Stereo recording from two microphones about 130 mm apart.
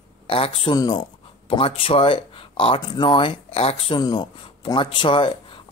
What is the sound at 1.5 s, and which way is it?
Speech, 45° left (ahead or behind).